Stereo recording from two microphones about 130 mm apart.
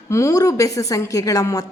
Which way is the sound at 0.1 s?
25° left (ahead or behind).